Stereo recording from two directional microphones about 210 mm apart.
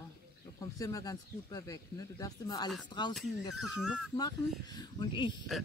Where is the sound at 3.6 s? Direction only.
Centre (ahead or behind).